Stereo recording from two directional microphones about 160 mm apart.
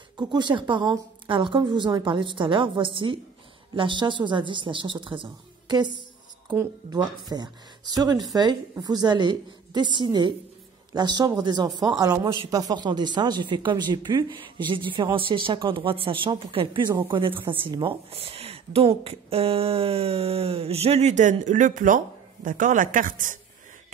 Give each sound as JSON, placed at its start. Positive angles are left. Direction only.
{"t": 0.2, "sound": "a woman's voice", "side_deg": -25}
{"t": 6.5, "sound": "speech", "side_deg": -15}
{"t": 7.0, "sound": "a woman's voice", "side_deg": -25}